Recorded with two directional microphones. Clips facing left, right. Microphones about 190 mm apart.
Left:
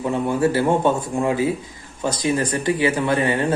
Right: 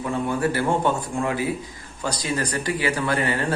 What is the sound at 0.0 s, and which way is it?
Speech, 25° left (ahead or behind).